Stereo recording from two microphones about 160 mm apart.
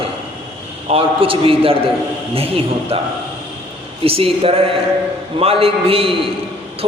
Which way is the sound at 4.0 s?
35° right (ahead or behind).